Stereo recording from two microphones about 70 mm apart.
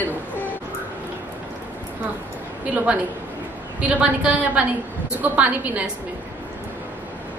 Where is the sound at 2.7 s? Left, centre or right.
Right.